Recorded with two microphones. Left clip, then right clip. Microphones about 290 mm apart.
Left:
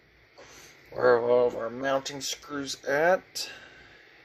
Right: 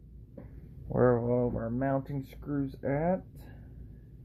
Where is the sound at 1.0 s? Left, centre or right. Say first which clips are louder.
Left 7 dB; centre.